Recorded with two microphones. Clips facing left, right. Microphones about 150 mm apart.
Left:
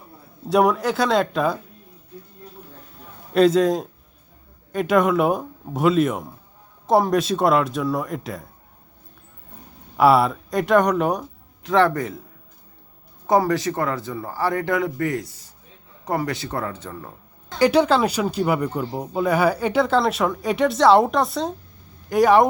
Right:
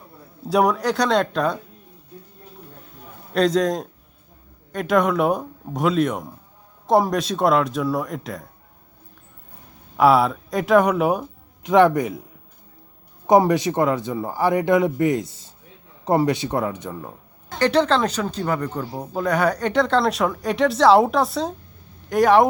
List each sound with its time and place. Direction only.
0.4 s speech: centre (ahead or behind)
3.3 s speech: centre (ahead or behind)
10.0 s speech: centre (ahead or behind)
11.6 s speech: 15° right (ahead or behind)
13.2 s speech: 20° right (ahead or behind)
17.6 s speech: 10° left (ahead or behind)